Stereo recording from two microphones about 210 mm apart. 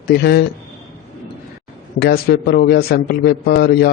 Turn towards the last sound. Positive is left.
turn(degrees=50)  # may be behind; listen again after turning